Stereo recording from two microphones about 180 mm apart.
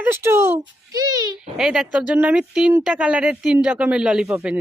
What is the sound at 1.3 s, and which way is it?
Speech, 5° right (ahead or behind).